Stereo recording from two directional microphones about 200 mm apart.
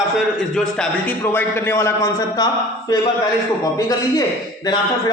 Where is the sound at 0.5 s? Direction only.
5° left (ahead or behind).